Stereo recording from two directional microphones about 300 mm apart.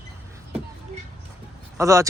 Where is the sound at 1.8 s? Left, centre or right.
Centre.